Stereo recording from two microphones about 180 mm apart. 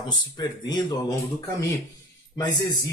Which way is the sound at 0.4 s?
20° left (ahead or behind).